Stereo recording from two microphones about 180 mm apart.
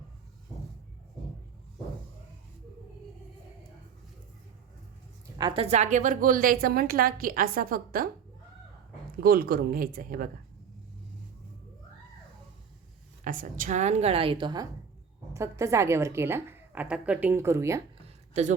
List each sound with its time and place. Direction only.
5.4 s a woman's voice: 25° right (ahead or behind)
5.6 s a woman's voice: 40° right (ahead or behind)
9.2 s speech: 55° right (ahead or behind)
13.2 s a woman's voice: 45° right (ahead or behind); by 17.8 s 15° right (ahead or behind)